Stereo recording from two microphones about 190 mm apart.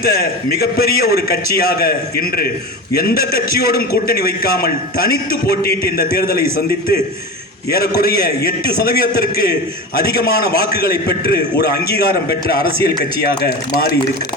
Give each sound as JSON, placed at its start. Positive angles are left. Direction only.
{"t": 0.0, "sound": "a man's voice", "side_deg": 50}
{"t": 7.7, "sound": "a man's voice", "side_deg": 50}